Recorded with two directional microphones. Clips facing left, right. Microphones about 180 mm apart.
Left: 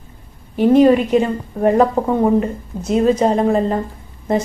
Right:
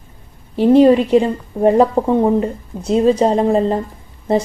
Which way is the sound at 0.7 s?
30° right (ahead or behind).